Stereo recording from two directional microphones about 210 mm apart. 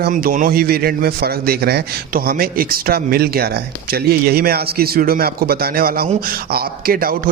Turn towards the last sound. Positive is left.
turn(degrees=-45)  # may be behind; listen again after turning